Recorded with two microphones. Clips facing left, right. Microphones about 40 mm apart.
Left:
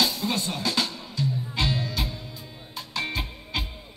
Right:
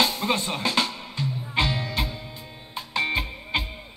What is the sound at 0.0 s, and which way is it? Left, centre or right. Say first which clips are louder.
Music: right 2 dB; right.